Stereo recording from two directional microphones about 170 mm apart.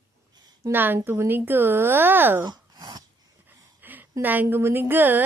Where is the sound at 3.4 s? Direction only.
10° right (ahead or behind).